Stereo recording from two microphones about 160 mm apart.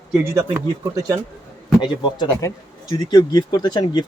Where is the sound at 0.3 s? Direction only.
15° right (ahead or behind).